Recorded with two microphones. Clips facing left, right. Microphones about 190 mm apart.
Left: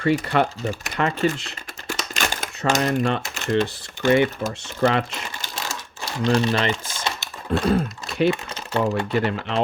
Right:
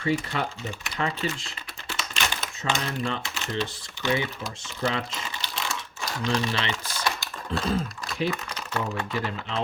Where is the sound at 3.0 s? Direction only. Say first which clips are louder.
Left 7 dB; 55° left (ahead or behind).